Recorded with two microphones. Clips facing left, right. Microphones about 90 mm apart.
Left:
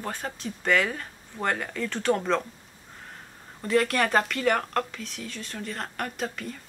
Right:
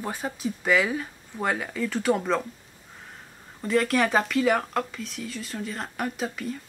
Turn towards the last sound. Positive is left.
turn(degrees=0)  # may be behind; listen again after turning